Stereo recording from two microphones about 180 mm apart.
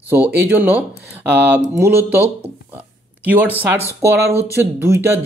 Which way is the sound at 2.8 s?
10° right (ahead or behind).